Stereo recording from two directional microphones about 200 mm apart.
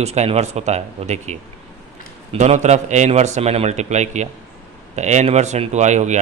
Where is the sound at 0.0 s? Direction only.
35° right (ahead or behind).